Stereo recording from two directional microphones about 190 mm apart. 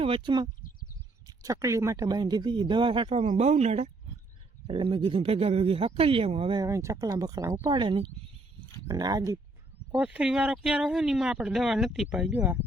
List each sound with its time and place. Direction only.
0.0 s speech: 25° right (ahead or behind)
9.9 s speech: 5° right (ahead or behind)